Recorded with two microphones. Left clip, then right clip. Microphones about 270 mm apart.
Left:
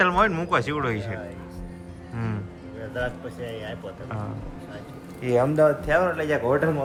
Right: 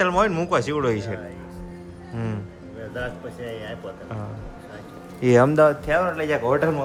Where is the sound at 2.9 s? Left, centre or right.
Centre.